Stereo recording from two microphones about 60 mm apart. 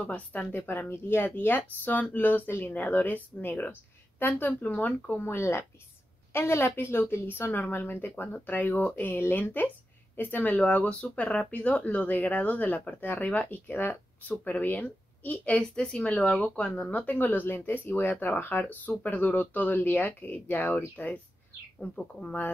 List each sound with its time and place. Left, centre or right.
0.1 s speech: left
5.3 s a woman's voice: left
15.5 s speech: centre
16.9 s speech: left
21.7 s speech: centre